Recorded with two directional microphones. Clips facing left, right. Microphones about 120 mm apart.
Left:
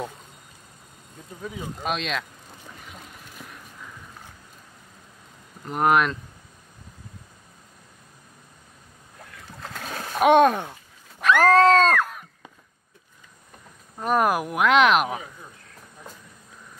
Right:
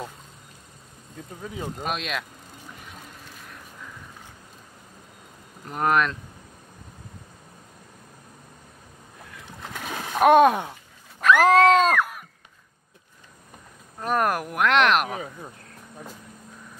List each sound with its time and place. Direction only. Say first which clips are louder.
1.8 s speech: left 3 dB; centre (ahead or behind)
5.7 s speech: left 2 dB; 5° left (ahead or behind)
9.5 s boat: right 1 dB; 15° right (ahead or behind)
10.2 s speech: right 1 dB; 5° right (ahead or behind)
11.3 s a sound: left 1 dB; 15° right (ahead or behind)
13.9 s speech: left 2 dB; centre (ahead or behind)